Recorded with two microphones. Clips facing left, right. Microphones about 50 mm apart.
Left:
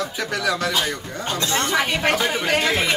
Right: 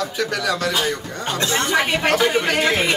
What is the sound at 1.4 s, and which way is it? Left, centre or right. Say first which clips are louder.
Speech: right 2 dB; right.